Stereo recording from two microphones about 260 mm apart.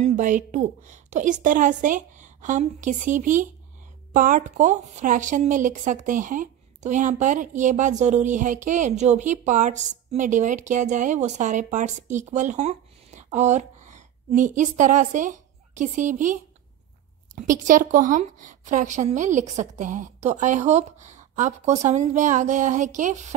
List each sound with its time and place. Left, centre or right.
0.0 s a woman's voice: right
17.4 s a woman's voice: right